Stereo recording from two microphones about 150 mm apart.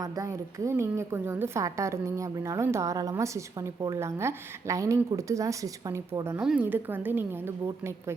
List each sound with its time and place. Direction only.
0.0 s a woman's voice: 20° right (ahead or behind)
6.4 s a woman's voice: 10° right (ahead or behind)